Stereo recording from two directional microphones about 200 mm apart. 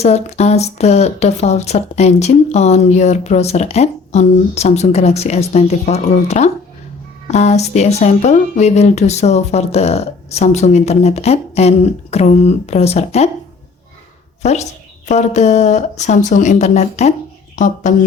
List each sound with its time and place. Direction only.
0.0 s speech: 35° left (ahead or behind)
14.4 s speech: 35° left (ahead or behind)